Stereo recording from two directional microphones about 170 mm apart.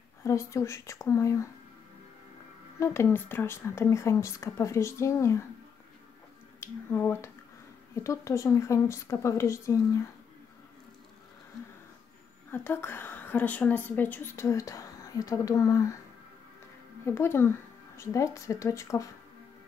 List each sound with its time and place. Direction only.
0.2 s a woman's voice: 15° left (ahead or behind)
2.8 s a woman's voice: 15° left (ahead or behind)
6.6 s a woman's voice: 15° left (ahead or behind)
12.4 s a woman's voice: 15° left (ahead or behind)
17.0 s a woman's voice: 15° left (ahead or behind)